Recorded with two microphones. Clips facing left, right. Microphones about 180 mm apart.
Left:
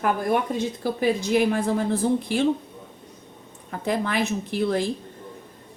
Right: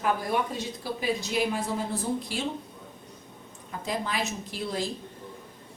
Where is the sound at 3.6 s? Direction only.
60° left (ahead or behind).